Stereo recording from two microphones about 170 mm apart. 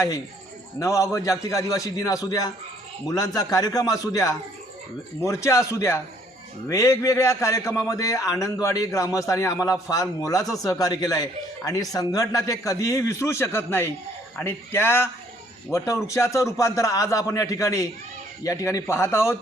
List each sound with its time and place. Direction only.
0.8 s a man's voice: 20° left (ahead or behind)